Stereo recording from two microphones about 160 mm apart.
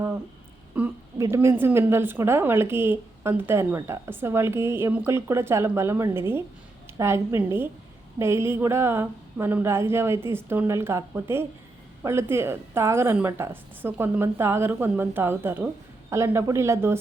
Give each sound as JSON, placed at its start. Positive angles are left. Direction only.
{"t": 0.7, "sound": "a woman's voice", "side_deg": -10}